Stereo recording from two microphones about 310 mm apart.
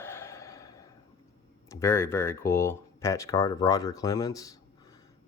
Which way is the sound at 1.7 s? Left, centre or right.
Centre.